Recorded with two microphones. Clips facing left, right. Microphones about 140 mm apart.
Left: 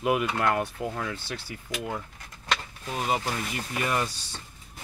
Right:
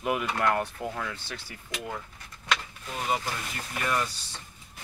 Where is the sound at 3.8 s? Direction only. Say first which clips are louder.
Left 1 dB; 20° left (ahead or behind).